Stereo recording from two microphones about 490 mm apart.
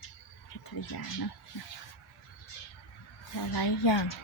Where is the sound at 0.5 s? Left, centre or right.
Left.